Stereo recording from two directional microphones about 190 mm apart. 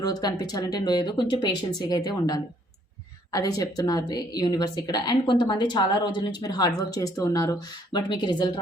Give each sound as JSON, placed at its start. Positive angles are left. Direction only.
{"t": 0.0, "sound": "a woman's voice", "side_deg": 20}